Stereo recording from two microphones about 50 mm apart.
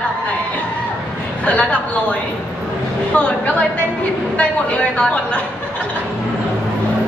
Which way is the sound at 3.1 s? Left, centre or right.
Left.